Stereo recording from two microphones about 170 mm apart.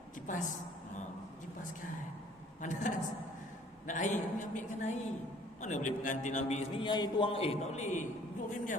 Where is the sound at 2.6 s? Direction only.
45° left (ahead or behind).